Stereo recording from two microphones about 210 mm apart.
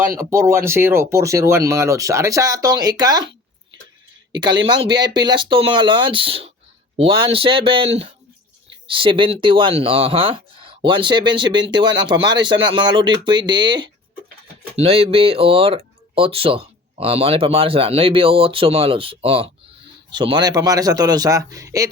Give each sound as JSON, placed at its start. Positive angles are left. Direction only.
{"t": 0.2, "sound": "speech", "side_deg": -15}
{"t": 4.3, "sound": "speech", "side_deg": -20}